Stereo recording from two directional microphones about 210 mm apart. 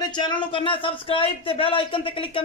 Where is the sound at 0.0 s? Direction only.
20° left (ahead or behind).